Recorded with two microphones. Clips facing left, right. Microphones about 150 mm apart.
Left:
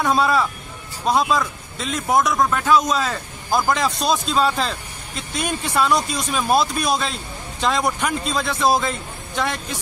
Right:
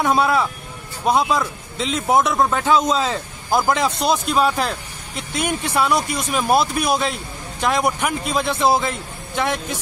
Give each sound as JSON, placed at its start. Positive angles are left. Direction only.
{"t": 0.0, "sound": "speech", "side_deg": -15}